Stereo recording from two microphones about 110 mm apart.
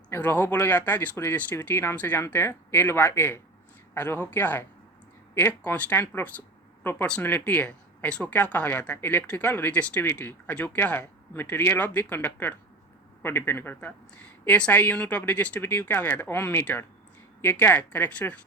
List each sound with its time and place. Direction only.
0.1 s speech: 20° left (ahead or behind)